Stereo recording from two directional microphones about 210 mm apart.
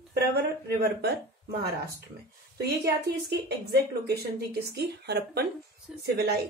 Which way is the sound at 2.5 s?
50° right (ahead or behind).